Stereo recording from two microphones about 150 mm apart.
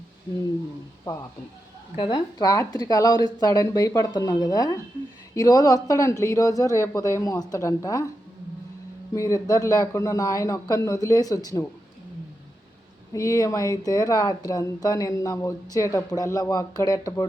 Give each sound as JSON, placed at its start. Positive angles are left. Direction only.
{"t": 2.0, "sound": "speech", "side_deg": 30}
{"t": 9.1, "sound": "speech", "side_deg": 20}
{"t": 13.1, "sound": "speech", "side_deg": 20}